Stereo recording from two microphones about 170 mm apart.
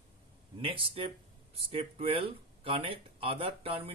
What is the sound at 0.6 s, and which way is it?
Speech, 30° right (ahead or behind).